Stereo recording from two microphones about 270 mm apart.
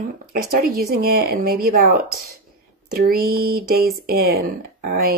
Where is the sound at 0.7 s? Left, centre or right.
Right.